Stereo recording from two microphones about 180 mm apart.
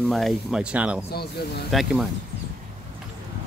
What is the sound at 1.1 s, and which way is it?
Speech, 60° left (ahead or behind).